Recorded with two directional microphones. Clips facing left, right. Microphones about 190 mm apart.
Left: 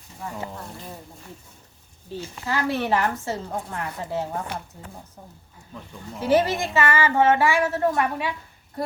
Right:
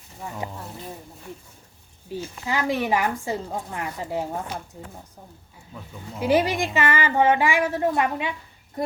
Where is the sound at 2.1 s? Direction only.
15° right (ahead or behind).